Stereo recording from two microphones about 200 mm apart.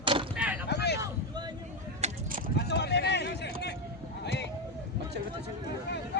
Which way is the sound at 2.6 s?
55° left (ahead or behind).